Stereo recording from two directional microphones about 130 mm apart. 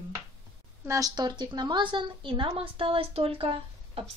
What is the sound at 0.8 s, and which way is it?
A woman's voice, 25° right (ahead or behind).